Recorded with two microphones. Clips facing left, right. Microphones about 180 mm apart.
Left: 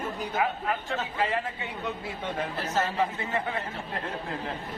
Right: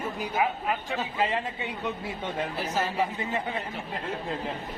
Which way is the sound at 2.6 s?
10° right (ahead or behind).